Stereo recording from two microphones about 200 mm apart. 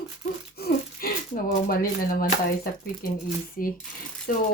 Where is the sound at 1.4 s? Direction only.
45° left (ahead or behind).